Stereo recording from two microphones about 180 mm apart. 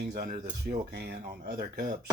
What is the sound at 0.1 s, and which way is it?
Speech, 50° right (ahead or behind).